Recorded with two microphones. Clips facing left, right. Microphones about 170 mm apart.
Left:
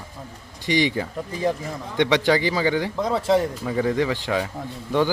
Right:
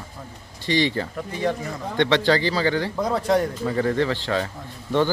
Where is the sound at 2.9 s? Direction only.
Centre (ahead or behind).